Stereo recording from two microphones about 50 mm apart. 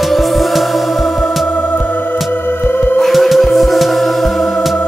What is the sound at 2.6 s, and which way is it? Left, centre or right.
Music, left.